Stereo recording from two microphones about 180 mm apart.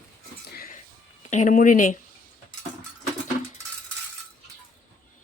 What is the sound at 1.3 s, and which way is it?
Speech, 45° left (ahead or behind).